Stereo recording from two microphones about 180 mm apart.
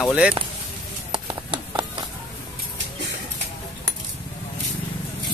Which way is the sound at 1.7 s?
25° right (ahead or behind).